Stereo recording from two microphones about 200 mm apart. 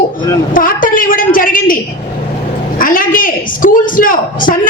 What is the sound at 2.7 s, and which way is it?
A woman's voice, 45° left (ahead or behind).